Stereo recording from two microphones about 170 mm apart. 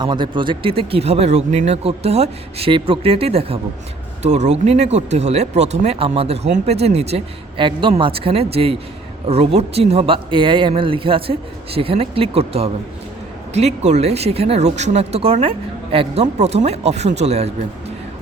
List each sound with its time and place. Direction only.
0.0 s speech: 25° right (ahead or behind)